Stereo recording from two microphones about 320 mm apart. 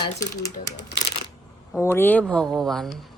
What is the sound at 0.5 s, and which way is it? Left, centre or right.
Speech, left.